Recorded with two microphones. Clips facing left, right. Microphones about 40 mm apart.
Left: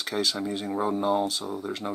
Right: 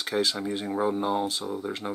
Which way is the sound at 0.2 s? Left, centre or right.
Centre.